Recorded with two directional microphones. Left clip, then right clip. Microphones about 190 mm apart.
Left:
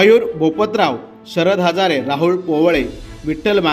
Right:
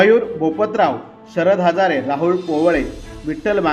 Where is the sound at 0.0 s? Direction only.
35° left (ahead or behind).